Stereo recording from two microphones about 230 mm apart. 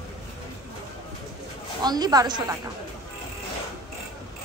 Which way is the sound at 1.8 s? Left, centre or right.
Centre.